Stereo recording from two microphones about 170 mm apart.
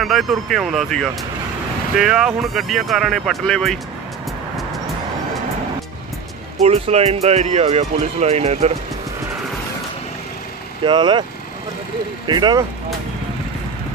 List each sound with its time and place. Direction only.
0.0 s speech: centre (ahead or behind)
6.6 s speech: 40° right (ahead or behind)
10.8 s speech: 25° right (ahead or behind)
12.3 s speech: 25° right (ahead or behind)